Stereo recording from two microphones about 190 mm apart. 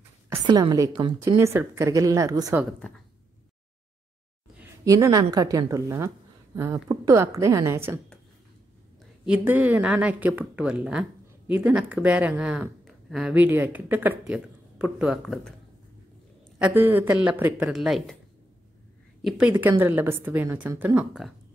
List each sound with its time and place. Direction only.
0.3 s a woman's voice: 20° right (ahead or behind)
4.6 s speech: 15° right (ahead or behind)
9.2 s speech: 5° right (ahead or behind)
16.5 s speech: 10° right (ahead or behind)
19.2 s speech: 5° right (ahead or behind)